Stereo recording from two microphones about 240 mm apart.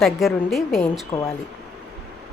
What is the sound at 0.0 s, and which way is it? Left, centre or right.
Speech, centre.